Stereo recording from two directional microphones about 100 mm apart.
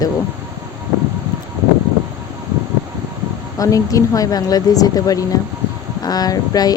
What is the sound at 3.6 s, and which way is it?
Speech, 35° left (ahead or behind).